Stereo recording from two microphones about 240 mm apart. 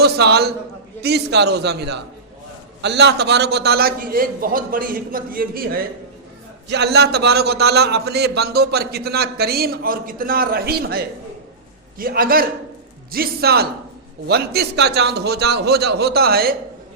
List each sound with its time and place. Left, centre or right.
0.0 s a man's voice: right